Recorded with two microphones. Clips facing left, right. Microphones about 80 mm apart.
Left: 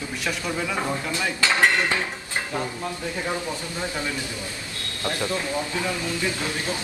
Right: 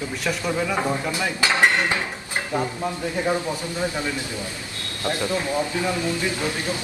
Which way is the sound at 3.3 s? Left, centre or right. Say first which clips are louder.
Right 4 dB; centre.